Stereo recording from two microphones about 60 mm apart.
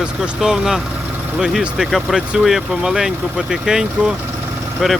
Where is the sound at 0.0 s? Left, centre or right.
Centre.